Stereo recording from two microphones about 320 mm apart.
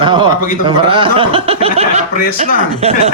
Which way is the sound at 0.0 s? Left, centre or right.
Centre.